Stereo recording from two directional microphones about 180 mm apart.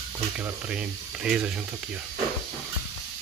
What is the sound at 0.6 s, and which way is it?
Speech, 5° right (ahead or behind).